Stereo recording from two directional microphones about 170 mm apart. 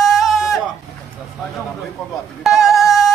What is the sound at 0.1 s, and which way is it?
Sheep, centre (ahead or behind).